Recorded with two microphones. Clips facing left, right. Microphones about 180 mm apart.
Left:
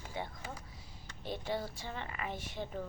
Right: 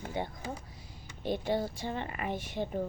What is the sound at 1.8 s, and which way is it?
Speech, 50° right (ahead or behind).